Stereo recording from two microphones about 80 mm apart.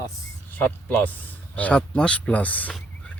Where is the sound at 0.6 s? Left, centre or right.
Left.